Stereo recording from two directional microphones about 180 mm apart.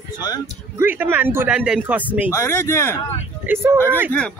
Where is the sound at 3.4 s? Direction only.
10° right (ahead or behind).